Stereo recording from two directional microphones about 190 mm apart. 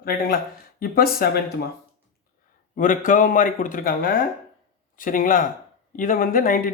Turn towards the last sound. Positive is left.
turn(degrees=45)  # may be behind; listen again after turning